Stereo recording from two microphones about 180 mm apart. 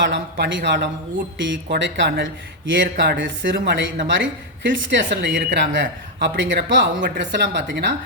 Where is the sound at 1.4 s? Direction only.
90° right.